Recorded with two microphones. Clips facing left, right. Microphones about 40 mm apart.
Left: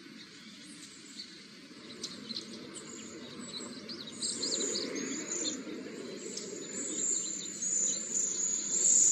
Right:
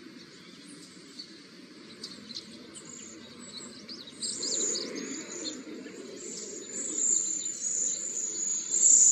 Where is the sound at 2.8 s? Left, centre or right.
Left.